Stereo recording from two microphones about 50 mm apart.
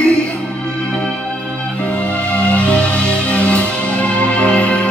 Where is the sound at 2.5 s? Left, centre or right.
Left.